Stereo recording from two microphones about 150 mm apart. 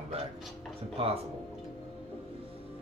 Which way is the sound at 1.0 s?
40° right (ahead or behind).